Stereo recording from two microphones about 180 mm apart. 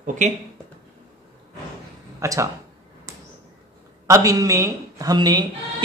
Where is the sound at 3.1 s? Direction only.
15° right (ahead or behind).